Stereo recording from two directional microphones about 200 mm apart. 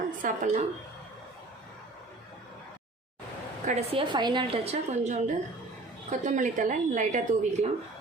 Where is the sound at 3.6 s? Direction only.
30° right (ahead or behind).